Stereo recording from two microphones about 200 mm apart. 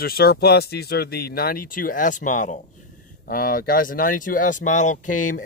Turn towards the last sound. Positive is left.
turn(degrees=40)  # may be behind; listen again after turning